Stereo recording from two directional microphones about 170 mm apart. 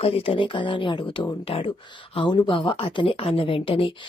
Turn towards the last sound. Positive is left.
turn(degrees=30)  # may be behind; listen again after turning